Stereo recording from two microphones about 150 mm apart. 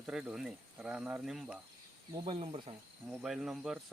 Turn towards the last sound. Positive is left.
turn(degrees=-5)  # may be behind; listen again after turning